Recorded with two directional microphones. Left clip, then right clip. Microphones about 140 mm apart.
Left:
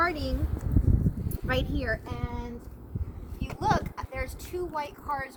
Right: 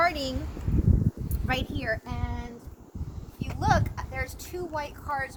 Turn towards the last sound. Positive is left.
turn(degrees=-10)  # may be behind; listen again after turning